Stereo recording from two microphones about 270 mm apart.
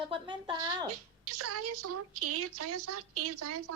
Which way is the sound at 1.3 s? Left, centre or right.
Right.